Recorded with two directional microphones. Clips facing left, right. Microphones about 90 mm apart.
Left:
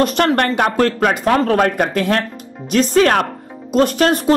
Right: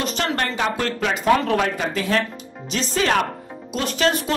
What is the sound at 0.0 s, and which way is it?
Speech, 55° left (ahead or behind).